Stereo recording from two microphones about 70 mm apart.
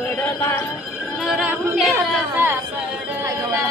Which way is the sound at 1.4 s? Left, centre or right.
Right.